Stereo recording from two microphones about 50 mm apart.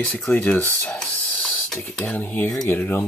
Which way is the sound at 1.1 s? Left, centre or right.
Left.